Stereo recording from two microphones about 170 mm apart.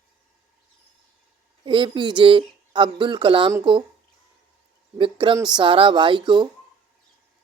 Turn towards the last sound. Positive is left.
turn(degrees=-25)  # may be behind; listen again after turning